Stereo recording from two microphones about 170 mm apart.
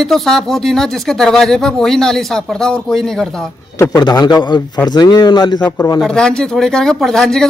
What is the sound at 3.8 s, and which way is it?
Speech, 20° left (ahead or behind).